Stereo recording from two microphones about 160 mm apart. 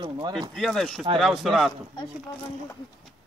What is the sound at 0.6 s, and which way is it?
Speech, centre (ahead or behind).